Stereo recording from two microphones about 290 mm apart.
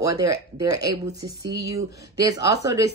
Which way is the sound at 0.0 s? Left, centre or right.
Centre.